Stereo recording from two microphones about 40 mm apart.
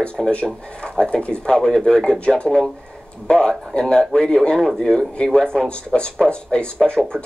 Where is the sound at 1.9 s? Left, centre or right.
Left.